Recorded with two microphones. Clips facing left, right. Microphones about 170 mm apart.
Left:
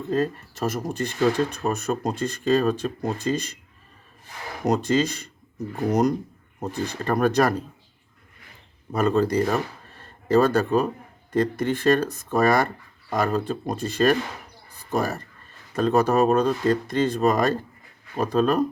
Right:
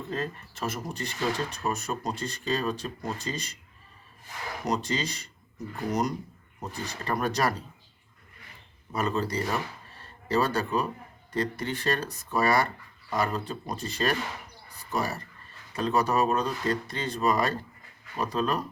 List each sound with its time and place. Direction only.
0.1 s speech: 45° left (ahead or behind)
4.6 s speech: 50° left (ahead or behind)
8.9 s speech: 55° left (ahead or behind)